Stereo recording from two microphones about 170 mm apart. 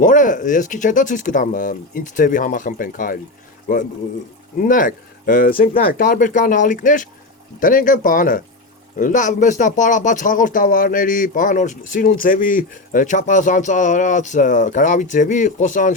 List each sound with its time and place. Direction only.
0.0 s speech: 50° left (ahead or behind)